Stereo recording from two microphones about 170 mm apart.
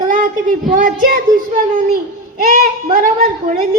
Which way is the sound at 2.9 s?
55° right (ahead or behind).